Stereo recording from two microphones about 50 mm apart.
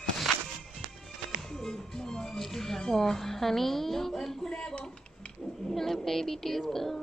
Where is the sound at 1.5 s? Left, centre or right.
Centre.